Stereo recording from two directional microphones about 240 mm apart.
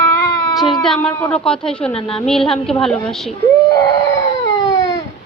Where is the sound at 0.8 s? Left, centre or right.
Centre.